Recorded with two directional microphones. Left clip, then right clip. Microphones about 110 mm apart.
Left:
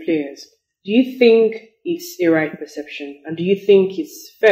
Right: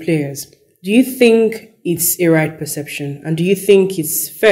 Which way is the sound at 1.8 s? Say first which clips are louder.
Right 3 dB; 40° right (ahead or behind).